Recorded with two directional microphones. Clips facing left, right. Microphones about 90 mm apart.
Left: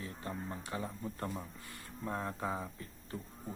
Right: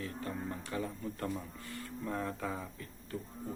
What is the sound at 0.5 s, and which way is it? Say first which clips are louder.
Speech: right 2 dB; 25° left (ahead or behind).